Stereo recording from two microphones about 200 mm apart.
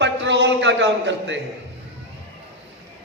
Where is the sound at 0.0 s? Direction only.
60° right (ahead or behind).